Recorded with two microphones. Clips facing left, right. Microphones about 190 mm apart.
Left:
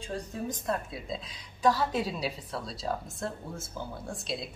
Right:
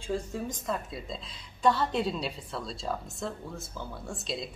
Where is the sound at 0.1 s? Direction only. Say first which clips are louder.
Right 3 dB; centre (ahead or behind).